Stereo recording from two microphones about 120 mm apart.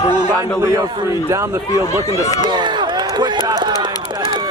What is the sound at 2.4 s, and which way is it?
Run, 40° right (ahead or behind).